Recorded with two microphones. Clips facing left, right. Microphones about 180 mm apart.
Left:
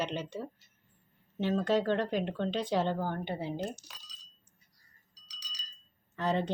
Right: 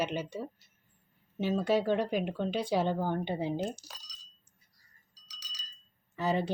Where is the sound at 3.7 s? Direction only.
40° right (ahead or behind).